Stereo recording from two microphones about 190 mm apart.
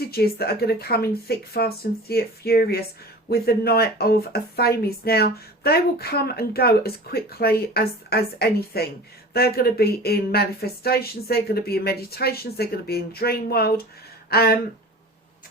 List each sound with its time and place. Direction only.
0.1 s speech: 55° left (ahead or behind)